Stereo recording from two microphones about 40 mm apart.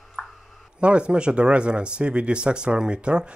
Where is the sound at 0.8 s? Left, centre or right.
Right.